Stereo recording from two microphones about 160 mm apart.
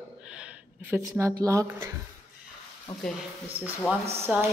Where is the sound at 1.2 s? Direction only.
20° right (ahead or behind).